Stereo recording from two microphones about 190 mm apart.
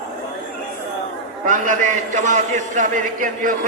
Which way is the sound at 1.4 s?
40° right (ahead or behind).